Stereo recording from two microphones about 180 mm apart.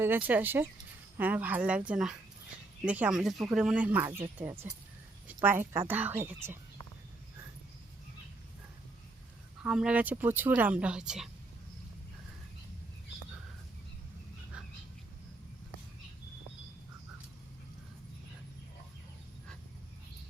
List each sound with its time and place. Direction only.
0.0 s speech: 10° right (ahead or behind)
9.6 s speech: 5° right (ahead or behind)
14.5 s a sound: 5° right (ahead or behind)